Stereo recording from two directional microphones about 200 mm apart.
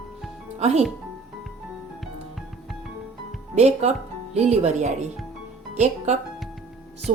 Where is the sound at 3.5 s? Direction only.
35° right (ahead or behind).